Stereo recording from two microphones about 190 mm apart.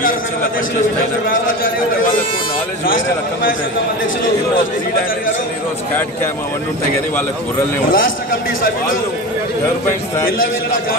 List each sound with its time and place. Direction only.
7.9 s a man's voice: 45° left (ahead or behind)